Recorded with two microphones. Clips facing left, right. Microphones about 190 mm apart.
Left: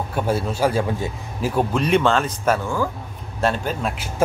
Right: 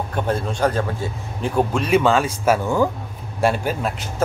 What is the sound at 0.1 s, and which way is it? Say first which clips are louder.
Speech: left 2 dB; 5° left (ahead or behind).